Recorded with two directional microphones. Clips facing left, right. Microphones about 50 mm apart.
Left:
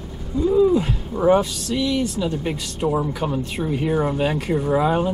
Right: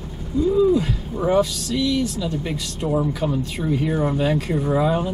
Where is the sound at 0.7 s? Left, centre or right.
Centre.